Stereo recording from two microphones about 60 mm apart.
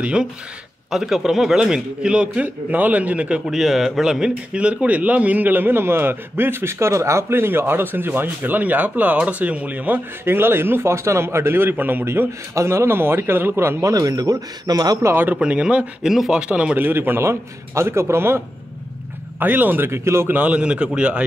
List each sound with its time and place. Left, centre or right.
0.0 s a man's voice: centre
0.8 s a man's voice: centre; by 3.3 s right
3.4 s a man's voice: centre; by 10.0 s right
10.2 s a man's voice: right
13.8 s a man's voice: right
15.3 s a man's voice: centre
16.1 s speech: centre
16.3 s a man's voice: centre
16.7 s a man's voice: right
19.4 s speech: right
19.9 s a man's voice: right
20.3 s a man's voice: right